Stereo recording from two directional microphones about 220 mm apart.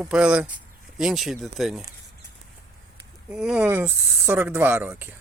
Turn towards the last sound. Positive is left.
turn(degrees=-5)  # may be behind; listen again after turning